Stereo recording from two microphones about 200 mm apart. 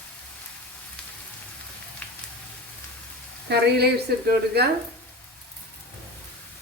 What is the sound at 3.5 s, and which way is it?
Speech, 55° right (ahead or behind).